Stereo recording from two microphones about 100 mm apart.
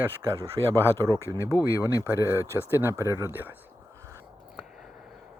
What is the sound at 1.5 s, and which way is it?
Speech, 35° left (ahead or behind).